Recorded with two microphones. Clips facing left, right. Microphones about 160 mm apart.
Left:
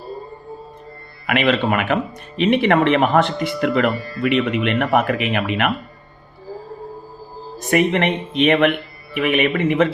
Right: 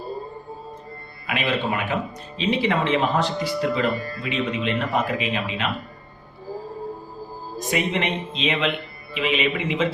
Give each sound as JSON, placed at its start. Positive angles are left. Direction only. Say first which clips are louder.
{"t": 1.3, "sound": "speech", "louder": "left 7 dB", "side_deg": 70}
{"t": 7.7, "sound": "speech", "louder": "left 7 dB", "side_deg": 60}